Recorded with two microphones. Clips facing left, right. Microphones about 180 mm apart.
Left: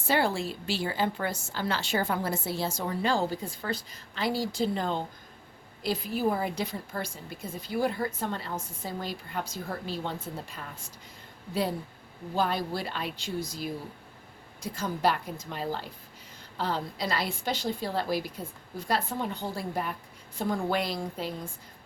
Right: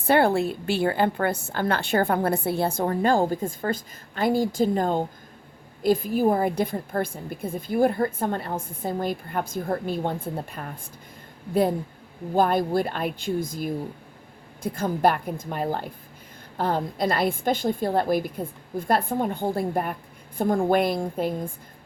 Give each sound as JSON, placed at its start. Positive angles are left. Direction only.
{"t": 0.0, "sound": "a woman's voice", "side_deg": -60}
{"t": 12.3, "sound": "a woman's voice", "side_deg": -50}